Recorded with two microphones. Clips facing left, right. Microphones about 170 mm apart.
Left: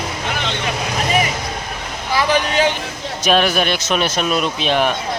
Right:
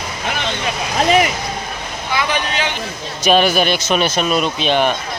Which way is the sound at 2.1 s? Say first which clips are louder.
Left 4 dB; 40° left (ahead or behind).